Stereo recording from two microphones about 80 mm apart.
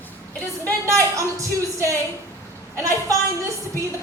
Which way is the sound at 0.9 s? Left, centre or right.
Right.